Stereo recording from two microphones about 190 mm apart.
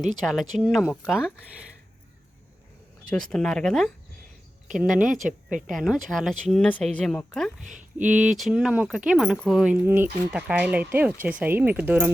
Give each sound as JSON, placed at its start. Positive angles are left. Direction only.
{"t": 0.2, "sound": "speech", "side_deg": 0}
{"t": 3.2, "sound": "speech", "side_deg": 5}
{"t": 7.6, "sound": "speech", "side_deg": -40}
{"t": 8.0, "sound": "speech", "side_deg": -5}